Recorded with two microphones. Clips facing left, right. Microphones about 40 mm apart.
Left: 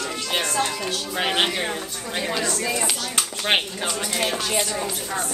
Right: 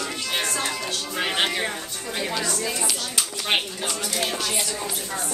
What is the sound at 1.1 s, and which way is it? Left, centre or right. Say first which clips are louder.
Speech: left 2 dB; centre.